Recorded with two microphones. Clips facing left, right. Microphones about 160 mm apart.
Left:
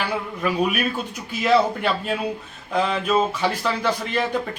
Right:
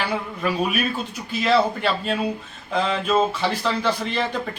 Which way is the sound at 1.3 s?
10° left (ahead or behind).